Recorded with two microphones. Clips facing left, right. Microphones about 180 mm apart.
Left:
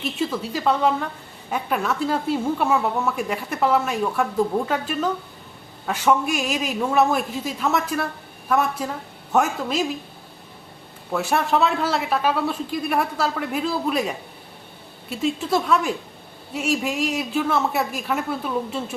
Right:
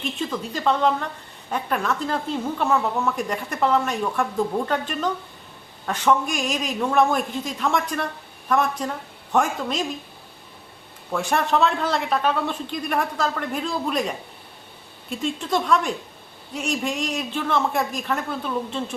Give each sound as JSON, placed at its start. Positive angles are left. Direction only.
{"t": 0.2, "sound": "a woman's voice", "side_deg": 10}
{"t": 11.1, "sound": "a man's voice", "side_deg": 5}